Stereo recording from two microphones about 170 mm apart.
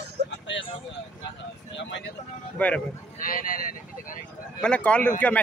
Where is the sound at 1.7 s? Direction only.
90° left.